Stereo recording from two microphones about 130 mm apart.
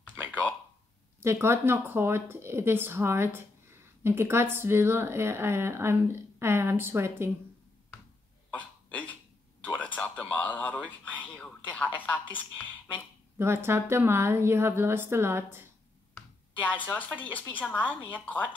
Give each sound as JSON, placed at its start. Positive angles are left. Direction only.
{"t": 0.3, "sound": "a sound", "side_deg": 10}
{"t": 1.2, "sound": "speech", "side_deg": -20}
{"t": 8.5, "sound": "a sound", "side_deg": 10}
{"t": 11.3, "sound": "speech", "side_deg": 10}
{"t": 13.4, "sound": "speech", "side_deg": -20}
{"t": 16.2, "sound": "speech", "side_deg": 10}